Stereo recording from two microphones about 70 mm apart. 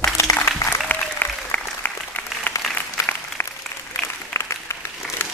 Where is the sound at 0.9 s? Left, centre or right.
Left.